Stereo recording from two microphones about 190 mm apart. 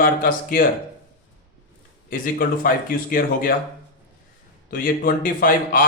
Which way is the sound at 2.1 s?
50° left (ahead or behind).